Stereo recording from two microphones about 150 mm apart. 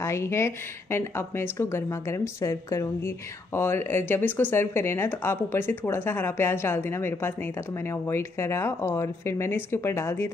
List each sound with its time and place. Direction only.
0.0 s speech: 20° left (ahead or behind)